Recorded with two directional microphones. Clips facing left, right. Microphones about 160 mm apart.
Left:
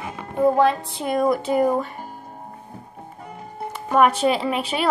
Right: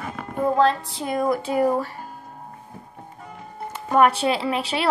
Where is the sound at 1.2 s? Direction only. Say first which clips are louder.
Left 2 dB; 5° left (ahead or behind).